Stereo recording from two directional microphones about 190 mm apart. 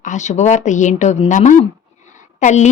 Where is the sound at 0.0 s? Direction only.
40° left (ahead or behind).